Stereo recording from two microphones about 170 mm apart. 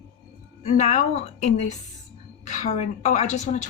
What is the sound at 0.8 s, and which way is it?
Speech, 45° left (ahead or behind).